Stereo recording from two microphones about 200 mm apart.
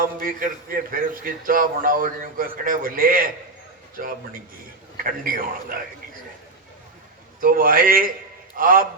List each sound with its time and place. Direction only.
0.2 s a man's voice: 45° right (ahead or behind)
5.2 s a man's voice: 45° right (ahead or behind)
7.4 s a man's voice: 45° right (ahead or behind)